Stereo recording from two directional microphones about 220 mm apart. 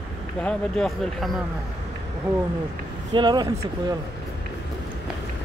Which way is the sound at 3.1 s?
20° right (ahead or behind).